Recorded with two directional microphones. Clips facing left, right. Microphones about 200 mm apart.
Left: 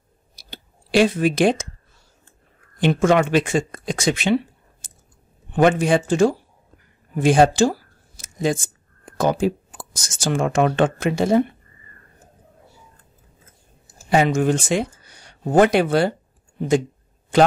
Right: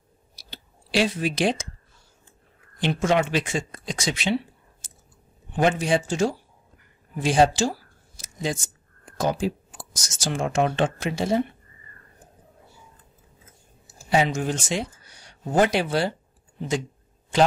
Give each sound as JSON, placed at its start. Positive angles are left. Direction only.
{"t": 0.4, "sound": "clicking", "side_deg": 55}
{"t": 2.8, "sound": "speech", "side_deg": 55}
{"t": 5.6, "sound": "speech", "side_deg": 55}
{"t": 8.2, "sound": "a sound", "side_deg": 50}
{"t": 9.2, "sound": "speech", "side_deg": 55}
{"t": 14.1, "sound": "speech", "side_deg": 55}